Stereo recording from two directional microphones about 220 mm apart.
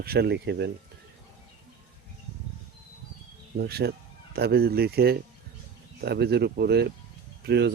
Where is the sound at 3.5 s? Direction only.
45° right (ahead or behind).